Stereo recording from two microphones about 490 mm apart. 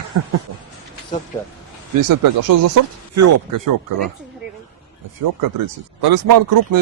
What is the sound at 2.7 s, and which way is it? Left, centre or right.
Speech, right.